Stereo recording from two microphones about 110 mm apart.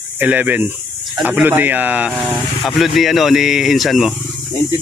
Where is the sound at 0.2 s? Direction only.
15° right (ahead or behind).